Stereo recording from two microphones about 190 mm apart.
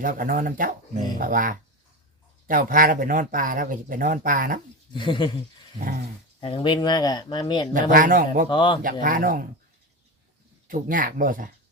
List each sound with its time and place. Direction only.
0.0 s speech: 45° right (ahead or behind)
4.9 s speech: 25° left (ahead or behind)
6.4 s speech: 25° left (ahead or behind)
7.7 s speech: 45° right (ahead or behind)
8.4 s speech: 25° left (ahead or behind)
8.8 s speech: 45° right (ahead or behind)
10.7 s speech: 45° right (ahead or behind)